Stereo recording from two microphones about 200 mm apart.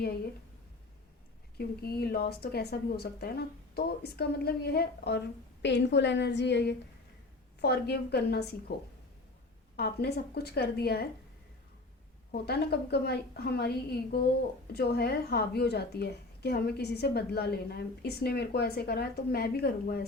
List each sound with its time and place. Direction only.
1.5 s a woman's voice: 50° left (ahead or behind)
9.7 s a woman's voice: 50° left (ahead or behind)
12.3 s a woman's voice: 55° left (ahead or behind)